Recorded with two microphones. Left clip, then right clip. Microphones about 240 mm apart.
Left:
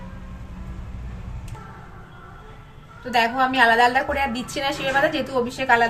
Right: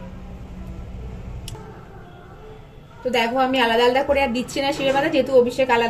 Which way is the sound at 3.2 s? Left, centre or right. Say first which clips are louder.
Left 2 dB; left.